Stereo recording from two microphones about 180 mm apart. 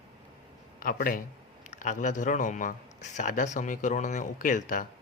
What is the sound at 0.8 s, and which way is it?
Speech, 50° left (ahead or behind).